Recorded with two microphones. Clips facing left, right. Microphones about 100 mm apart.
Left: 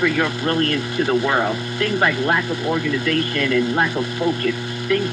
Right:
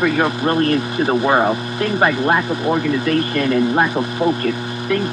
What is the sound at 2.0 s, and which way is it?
Speech, 30° right (ahead or behind).